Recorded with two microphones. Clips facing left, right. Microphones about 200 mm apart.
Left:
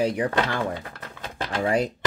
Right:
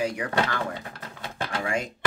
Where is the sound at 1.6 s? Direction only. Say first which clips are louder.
Left 7 dB; 35° left (ahead or behind).